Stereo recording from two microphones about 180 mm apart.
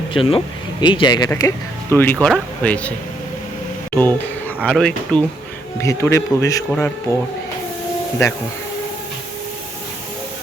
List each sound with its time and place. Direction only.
0.1 s speech: 30° left (ahead or behind); by 2.9 s 5° left (ahead or behind)
3.9 s speech: 10° left (ahead or behind)
5.8 s speech: 15° left (ahead or behind)
6.7 s speech: 5° left (ahead or behind)